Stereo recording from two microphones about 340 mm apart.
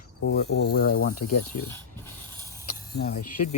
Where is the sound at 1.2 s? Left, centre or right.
Left.